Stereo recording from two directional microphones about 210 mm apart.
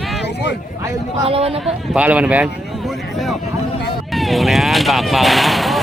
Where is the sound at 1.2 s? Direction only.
30° right (ahead or behind).